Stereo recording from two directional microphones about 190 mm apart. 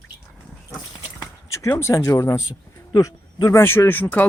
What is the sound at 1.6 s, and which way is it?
Speech, 15° left (ahead or behind).